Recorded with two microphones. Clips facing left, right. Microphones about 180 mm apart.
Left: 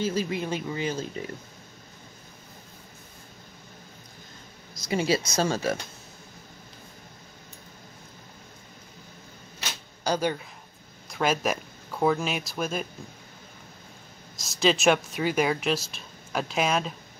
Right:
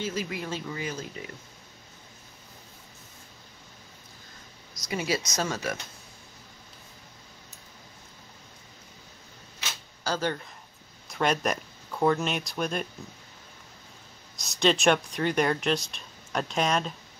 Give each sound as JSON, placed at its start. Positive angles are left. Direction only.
{"t": 0.0, "sound": "speech", "side_deg": 30}
{"t": 4.7, "sound": "speech", "side_deg": 30}
{"t": 10.0, "sound": "speech", "side_deg": 15}
{"t": 14.3, "sound": "speech", "side_deg": 0}